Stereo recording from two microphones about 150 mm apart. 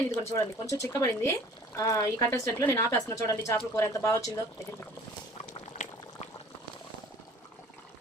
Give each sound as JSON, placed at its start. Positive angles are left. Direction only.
{"t": 0.1, "sound": "a woman's voice", "side_deg": 20}
{"t": 5.7, "sound": "boiling", "side_deg": 55}